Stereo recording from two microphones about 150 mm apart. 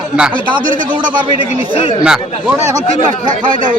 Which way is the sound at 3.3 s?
60° right (ahead or behind).